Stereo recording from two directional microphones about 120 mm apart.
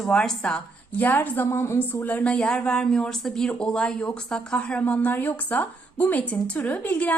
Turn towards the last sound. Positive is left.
turn(degrees=15)  # may be behind; listen again after turning